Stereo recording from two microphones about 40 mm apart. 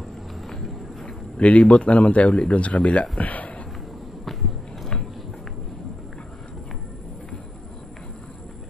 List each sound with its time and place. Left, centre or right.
1.4 s speech: left